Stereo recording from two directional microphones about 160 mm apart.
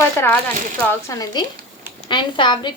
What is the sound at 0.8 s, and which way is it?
A woman's voice, 15° left (ahead or behind).